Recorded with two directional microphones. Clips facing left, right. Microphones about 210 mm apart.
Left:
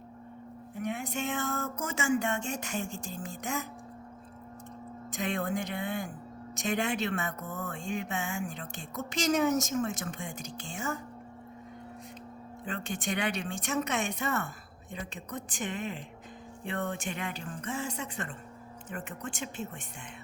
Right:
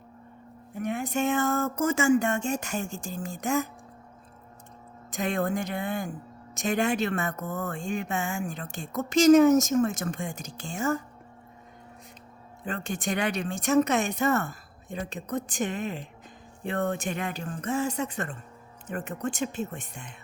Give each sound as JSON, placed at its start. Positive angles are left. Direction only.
{"t": 0.8, "sound": "speech", "side_deg": -45}
{"t": 5.1, "sound": "speech", "side_deg": -45}
{"t": 12.6, "sound": "speech", "side_deg": -45}